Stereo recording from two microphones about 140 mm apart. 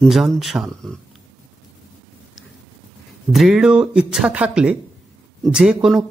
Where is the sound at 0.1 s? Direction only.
Centre (ahead or behind).